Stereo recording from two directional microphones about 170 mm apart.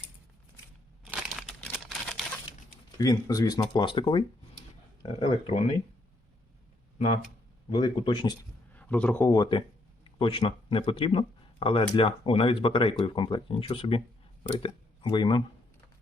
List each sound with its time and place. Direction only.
1.1 s crumpling: centre (ahead or behind)
3.0 s speech: 20° left (ahead or behind)
5.2 s speech: 30° left (ahead or behind)
7.7 s speech: 30° left (ahead or behind)
8.7 s a man's voice: 10° left (ahead or behind)
9.3 s speech: 25° left (ahead or behind)